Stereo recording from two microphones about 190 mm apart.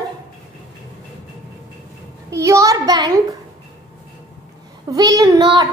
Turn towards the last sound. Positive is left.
turn(degrees=-25)  # may be behind; listen again after turning